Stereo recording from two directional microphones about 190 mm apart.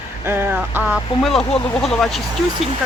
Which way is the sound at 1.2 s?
Centre (ahead or behind).